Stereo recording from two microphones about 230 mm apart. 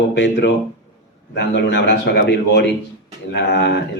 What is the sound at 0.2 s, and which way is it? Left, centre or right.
A man's voice, left.